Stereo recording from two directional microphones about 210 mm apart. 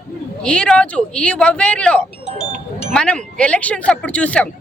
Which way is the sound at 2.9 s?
5° left (ahead or behind).